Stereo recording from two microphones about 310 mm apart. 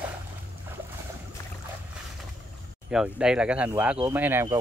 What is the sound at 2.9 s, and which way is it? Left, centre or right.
Speech, centre.